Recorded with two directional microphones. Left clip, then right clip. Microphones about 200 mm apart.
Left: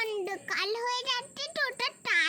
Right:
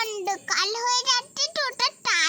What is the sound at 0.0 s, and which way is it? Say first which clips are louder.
Child singing: right 5 dB; 45° right (ahead or behind).